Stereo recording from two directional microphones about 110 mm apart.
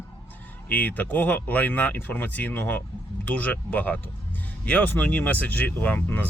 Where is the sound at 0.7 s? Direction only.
15° left (ahead or behind).